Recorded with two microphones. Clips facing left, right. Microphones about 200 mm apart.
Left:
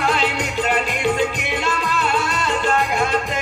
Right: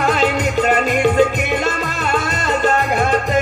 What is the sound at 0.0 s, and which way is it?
Music, 45° right (ahead or behind).